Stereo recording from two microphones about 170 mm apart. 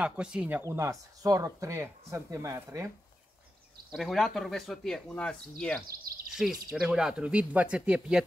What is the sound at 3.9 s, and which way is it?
Speech, centre (ahead or behind).